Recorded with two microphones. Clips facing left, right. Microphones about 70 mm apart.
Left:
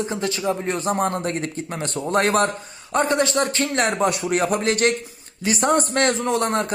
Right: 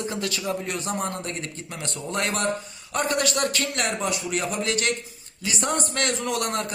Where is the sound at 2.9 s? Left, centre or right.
Left.